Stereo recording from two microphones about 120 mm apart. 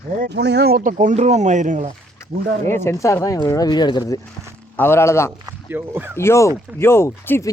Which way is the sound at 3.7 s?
35° left (ahead or behind).